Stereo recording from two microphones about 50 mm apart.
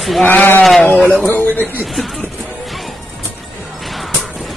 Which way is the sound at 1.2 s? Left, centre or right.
Left.